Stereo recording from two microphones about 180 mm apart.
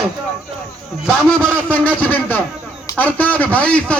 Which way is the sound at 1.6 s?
10° left (ahead or behind).